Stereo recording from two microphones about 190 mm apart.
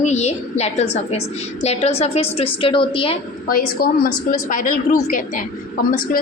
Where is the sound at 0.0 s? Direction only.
35° left (ahead or behind).